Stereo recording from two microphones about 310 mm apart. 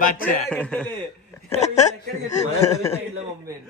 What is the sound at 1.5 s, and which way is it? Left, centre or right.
Speech, left.